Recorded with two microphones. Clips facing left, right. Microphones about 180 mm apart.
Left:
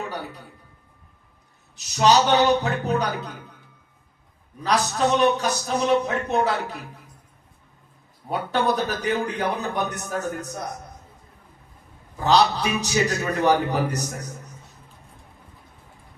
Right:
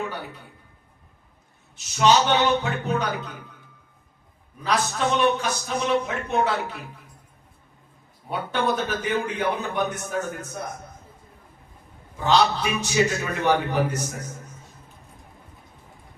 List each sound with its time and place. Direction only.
0.0 s a sound: 40° left (ahead or behind)
1.7 s a man's voice: 40° left (ahead or behind)
4.6 s a man's voice: 40° left (ahead or behind)
8.3 s a man's voice: 40° left (ahead or behind)
12.2 s a man's voice: 40° left (ahead or behind)